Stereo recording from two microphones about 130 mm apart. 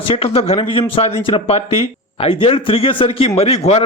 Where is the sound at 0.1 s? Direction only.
50° left (ahead or behind).